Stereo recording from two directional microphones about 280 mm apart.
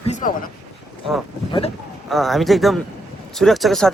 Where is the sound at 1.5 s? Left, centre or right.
Centre.